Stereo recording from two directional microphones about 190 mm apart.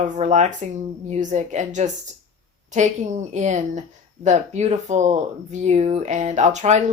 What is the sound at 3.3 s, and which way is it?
Speech, 40° right (ahead or behind).